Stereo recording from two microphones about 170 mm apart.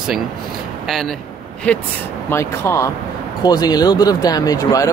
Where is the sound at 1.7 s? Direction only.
10° left (ahead or behind).